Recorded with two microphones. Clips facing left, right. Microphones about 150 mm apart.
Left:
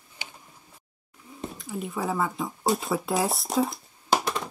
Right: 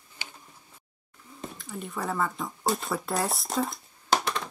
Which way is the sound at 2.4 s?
Centre (ahead or behind).